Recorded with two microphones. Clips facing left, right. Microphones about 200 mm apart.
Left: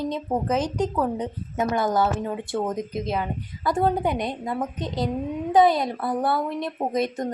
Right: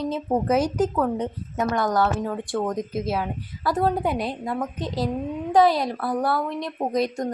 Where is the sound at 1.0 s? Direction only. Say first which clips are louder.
Right 1 dB; centre (ahead or behind).